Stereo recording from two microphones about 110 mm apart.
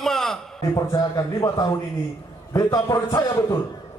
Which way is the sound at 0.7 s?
30° left (ahead or behind).